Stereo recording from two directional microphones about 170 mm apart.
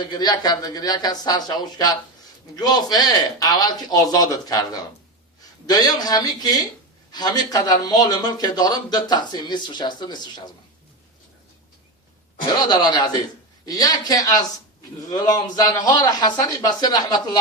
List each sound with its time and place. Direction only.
0.0 s speech: 25° left (ahead or behind)
12.5 s speech: 25° left (ahead or behind)